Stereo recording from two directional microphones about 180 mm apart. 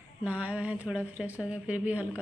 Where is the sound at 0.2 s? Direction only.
10° right (ahead or behind).